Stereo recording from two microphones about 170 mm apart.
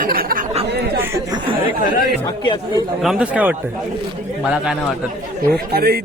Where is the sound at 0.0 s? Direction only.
60° right (ahead or behind).